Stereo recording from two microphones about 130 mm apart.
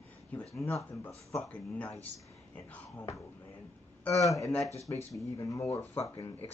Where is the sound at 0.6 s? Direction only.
20° left (ahead or behind).